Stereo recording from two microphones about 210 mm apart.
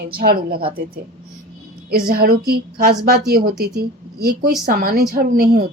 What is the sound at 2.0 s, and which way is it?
Speech, 45° right (ahead or behind).